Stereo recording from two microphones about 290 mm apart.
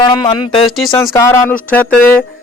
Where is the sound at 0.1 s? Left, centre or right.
Centre.